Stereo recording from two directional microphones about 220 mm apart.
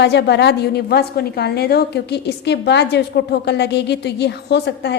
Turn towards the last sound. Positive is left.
turn(degrees=50)  # may be behind; listen again after turning